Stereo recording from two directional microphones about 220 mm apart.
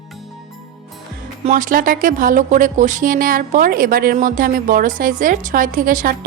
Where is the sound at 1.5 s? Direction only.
35° right (ahead or behind).